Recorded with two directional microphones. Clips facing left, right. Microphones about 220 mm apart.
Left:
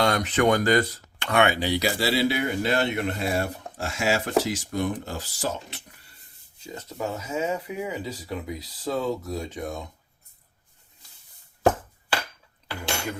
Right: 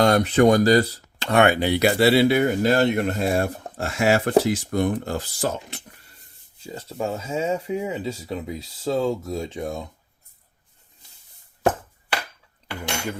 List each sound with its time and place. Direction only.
0.0 s speech: 40° right (ahead or behind)
1.5 s speech: 55° right (ahead or behind)
6.7 s speech: 30° right (ahead or behind)